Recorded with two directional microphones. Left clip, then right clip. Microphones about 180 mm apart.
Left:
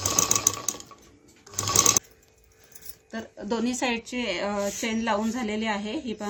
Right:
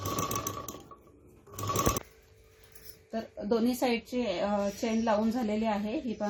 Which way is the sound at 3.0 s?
5° right (ahead or behind).